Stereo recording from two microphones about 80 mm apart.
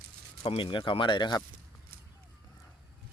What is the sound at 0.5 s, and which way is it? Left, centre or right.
Speech, left.